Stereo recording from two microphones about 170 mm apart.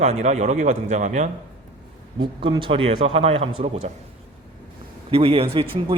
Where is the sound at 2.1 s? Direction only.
25° right (ahead or behind).